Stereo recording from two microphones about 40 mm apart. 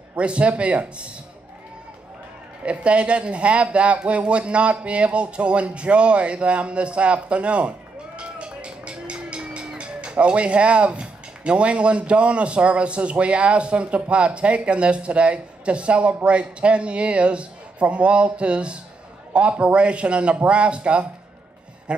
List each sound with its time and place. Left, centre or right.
0.1 s speech: right
2.6 s speech: right